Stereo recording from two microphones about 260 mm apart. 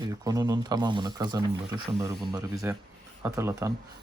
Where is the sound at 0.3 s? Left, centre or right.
Centre.